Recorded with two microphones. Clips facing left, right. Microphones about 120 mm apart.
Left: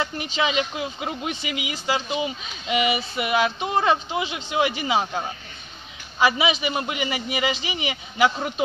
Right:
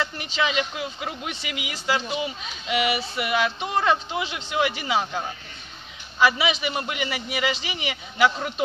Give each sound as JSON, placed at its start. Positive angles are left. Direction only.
{"t": 0.0, "sound": "a man's voice", "side_deg": 15}